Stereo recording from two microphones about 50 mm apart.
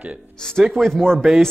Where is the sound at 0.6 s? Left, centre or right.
Centre.